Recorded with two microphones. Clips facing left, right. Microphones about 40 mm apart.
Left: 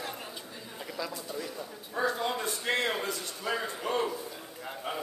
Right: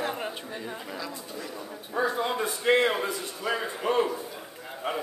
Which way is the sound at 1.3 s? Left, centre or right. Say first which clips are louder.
Even; centre.